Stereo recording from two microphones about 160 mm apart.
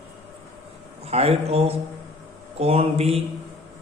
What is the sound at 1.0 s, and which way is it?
A man's voice, 40° right (ahead or behind).